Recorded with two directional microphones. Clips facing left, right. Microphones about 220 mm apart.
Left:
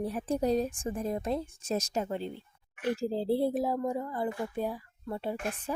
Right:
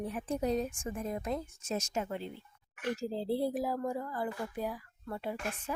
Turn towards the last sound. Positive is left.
turn(degrees=30)  # may be behind; listen again after turning